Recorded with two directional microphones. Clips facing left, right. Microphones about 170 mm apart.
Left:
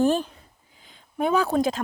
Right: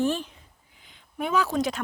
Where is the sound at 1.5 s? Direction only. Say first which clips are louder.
Left 4 dB; 35° left (ahead or behind).